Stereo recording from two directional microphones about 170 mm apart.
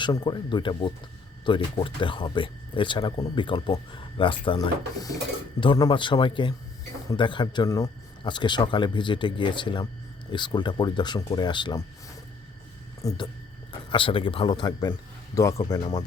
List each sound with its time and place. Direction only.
0.0 s speech: 25° left (ahead or behind)
13.0 s speech: 20° left (ahead or behind)
13.9 s speech: 30° left (ahead or behind)
14.7 s speech: 15° left (ahead or behind)